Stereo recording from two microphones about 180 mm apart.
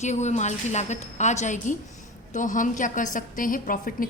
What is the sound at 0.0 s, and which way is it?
A woman's voice, 40° left (ahead or behind).